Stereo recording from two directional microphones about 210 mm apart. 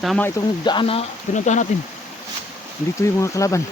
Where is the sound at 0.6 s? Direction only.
25° left (ahead or behind).